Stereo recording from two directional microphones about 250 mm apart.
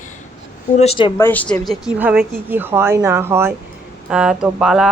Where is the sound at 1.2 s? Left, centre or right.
Centre.